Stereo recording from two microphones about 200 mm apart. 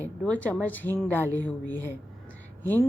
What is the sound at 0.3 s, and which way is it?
A woman's voice, 5° left (ahead or behind).